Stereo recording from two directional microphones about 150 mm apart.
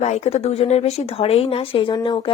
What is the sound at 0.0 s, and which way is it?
Speech, 45° left (ahead or behind).